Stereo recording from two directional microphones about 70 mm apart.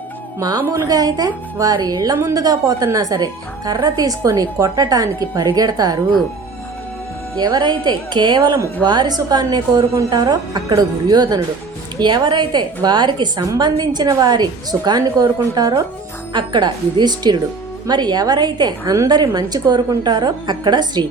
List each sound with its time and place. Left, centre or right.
0.3 s speech: right
7.3 s a woman's voice: right
11.9 s a woman's voice: right
14.2 s a woman's voice: right
16.3 s a woman's voice: right
19.0 s a woman's voice: right